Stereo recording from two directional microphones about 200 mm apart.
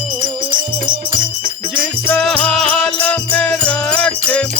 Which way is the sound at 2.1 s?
5° left (ahead or behind).